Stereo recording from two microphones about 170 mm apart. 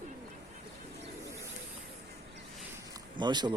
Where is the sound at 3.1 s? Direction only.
25° right (ahead or behind).